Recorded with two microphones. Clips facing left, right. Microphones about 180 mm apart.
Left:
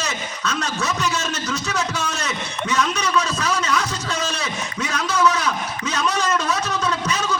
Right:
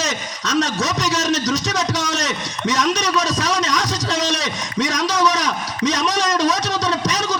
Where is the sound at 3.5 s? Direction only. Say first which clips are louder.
Right 2 dB; 80° right.